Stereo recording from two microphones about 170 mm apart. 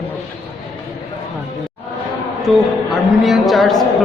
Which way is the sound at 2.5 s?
Centre (ahead or behind).